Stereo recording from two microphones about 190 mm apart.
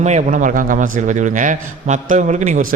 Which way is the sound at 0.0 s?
40° right (ahead or behind).